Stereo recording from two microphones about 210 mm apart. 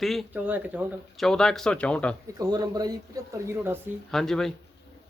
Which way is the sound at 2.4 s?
15° right (ahead or behind).